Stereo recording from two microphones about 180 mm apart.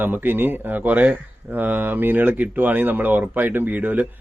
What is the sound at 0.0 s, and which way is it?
Speech, 10° right (ahead or behind).